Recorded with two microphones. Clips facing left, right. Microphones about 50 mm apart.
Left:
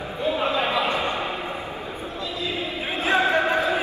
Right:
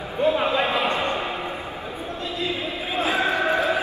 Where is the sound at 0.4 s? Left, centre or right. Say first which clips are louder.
Right 1 dB; right.